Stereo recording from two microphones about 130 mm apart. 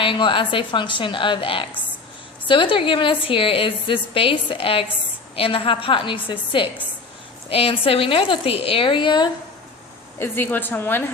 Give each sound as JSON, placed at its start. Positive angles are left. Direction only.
{"t": 0.0, "sound": "a woman's voice", "side_deg": 40}
{"t": 10.2, "sound": "a woman's voice", "side_deg": 15}